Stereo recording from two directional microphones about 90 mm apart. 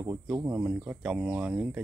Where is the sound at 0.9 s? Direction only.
10° right (ahead or behind).